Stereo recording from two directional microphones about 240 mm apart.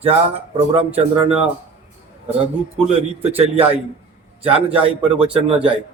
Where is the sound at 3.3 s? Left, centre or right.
Right.